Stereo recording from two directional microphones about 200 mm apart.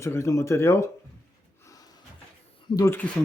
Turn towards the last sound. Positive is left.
turn(degrees=10)  # may be behind; listen again after turning